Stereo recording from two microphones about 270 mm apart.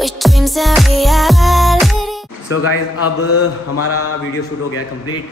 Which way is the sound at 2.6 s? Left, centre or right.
Left.